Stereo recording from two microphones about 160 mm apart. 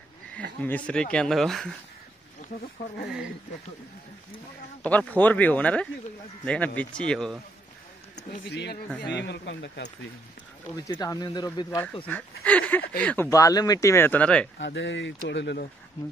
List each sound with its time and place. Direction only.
0.6 s speech: 10° left (ahead or behind)
4.8 s speech: 10° left (ahead or behind)
8.5 s speech: 90° left
10.9 s speech: 25° left (ahead or behind)
12.1 s speech: 10° left (ahead or behind)
13.3 s speech: 20° left (ahead or behind)
14.6 s speech: 90° left